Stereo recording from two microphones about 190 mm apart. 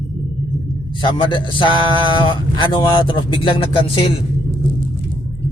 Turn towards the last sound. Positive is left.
turn(degrees=30)  # may be behind; listen again after turning